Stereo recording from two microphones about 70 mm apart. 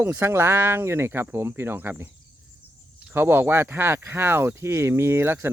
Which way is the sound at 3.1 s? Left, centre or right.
Right.